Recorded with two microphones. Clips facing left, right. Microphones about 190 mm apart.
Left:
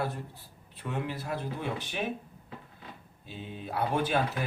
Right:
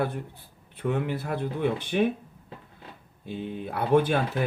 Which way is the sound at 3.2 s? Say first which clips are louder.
Right 7 dB; 55° right (ahead or behind).